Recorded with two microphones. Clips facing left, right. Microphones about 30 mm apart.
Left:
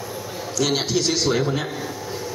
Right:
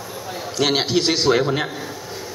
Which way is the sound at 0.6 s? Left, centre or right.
Right.